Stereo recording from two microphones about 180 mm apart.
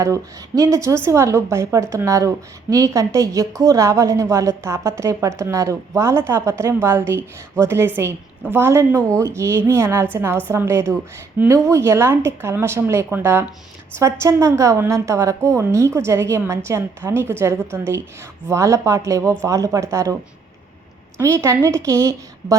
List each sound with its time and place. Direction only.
0.0 s a woman's voice: 20° right (ahead or behind)
21.2 s a woman's voice: 15° right (ahead or behind)